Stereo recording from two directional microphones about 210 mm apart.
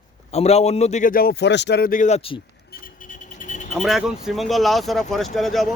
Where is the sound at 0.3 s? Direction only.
30° left (ahead or behind).